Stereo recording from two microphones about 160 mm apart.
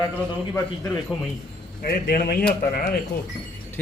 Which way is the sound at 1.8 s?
70° left (ahead or behind).